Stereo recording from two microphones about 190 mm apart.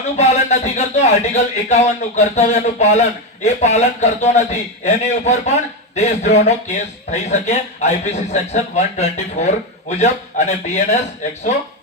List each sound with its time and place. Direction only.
0.2 s speech: 35° left (ahead or behind)